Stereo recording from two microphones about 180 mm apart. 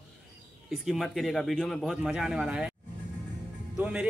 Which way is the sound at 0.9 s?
Centre (ahead or behind).